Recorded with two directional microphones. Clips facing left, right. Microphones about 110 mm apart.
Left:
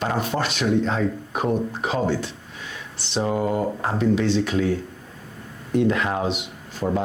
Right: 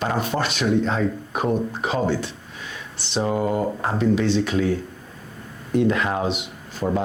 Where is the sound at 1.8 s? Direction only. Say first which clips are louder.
Right 1 dB; 25° right (ahead or behind).